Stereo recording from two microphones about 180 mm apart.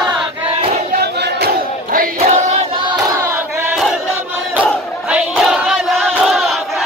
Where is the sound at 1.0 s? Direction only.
65° right (ahead or behind); by 2.5 s 45° right (ahead or behind).